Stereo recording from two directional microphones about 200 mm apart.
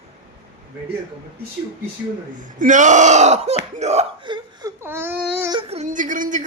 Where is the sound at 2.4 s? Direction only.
40° right (ahead or behind); by 4.7 s 25° right (ahead or behind).